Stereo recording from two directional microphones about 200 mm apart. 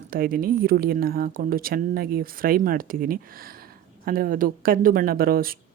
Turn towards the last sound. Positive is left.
turn(degrees=-45)  # may be behind; listen again after turning